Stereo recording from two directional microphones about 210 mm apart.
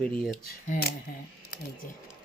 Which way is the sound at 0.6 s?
40° left (ahead or behind).